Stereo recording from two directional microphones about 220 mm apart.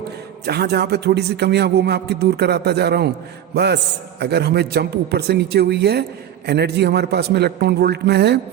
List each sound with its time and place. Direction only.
0.4 s a man's voice: 45° right (ahead or behind)